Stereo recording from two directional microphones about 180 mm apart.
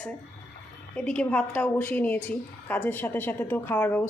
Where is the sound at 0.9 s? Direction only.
5° left (ahead or behind).